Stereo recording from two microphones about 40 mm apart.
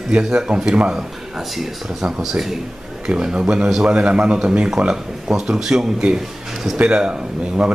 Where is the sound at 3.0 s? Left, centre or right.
Right.